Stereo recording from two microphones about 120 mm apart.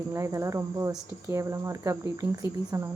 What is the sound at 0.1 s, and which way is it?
Speech, 25° right (ahead or behind).